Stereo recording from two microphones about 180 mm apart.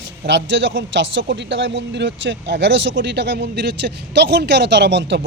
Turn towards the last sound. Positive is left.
turn(degrees=-75)  # may be behind; listen again after turning